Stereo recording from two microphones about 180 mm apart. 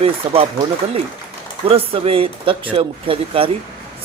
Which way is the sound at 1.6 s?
30° right (ahead or behind).